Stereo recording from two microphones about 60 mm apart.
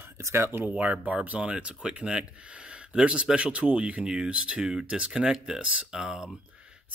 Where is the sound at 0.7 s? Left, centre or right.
Right.